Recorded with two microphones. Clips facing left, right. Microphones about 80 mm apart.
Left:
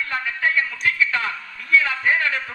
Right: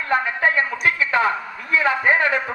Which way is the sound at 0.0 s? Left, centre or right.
Right.